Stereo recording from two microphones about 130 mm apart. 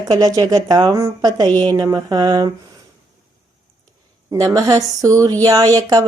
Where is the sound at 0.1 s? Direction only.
30° right (ahead or behind).